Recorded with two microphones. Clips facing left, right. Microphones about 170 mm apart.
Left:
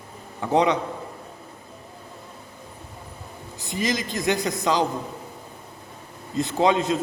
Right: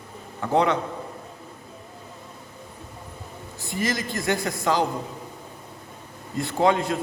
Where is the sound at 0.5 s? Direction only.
15° left (ahead or behind).